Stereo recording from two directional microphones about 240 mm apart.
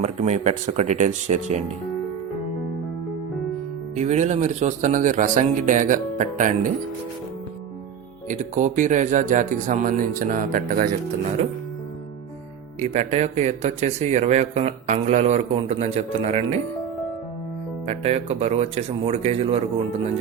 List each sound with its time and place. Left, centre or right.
0.0 s speech: right
3.9 s speech: right
8.3 s speech: right
12.8 s speech: right
17.8 s speech: right